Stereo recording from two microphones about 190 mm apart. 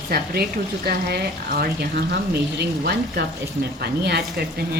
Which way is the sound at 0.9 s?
55° right (ahead or behind).